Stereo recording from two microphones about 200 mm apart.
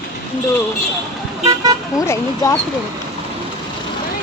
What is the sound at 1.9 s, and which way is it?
Speech, 15° left (ahead or behind).